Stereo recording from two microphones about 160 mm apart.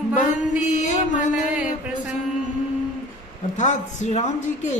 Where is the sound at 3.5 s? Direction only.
50° left (ahead or behind).